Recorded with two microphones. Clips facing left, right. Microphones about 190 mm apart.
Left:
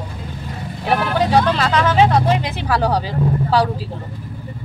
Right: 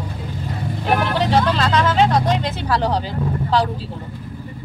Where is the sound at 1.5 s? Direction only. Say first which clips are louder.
Left 1 dB; 5° left (ahead or behind).